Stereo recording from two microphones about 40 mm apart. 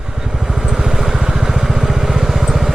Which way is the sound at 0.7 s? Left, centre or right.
Centre.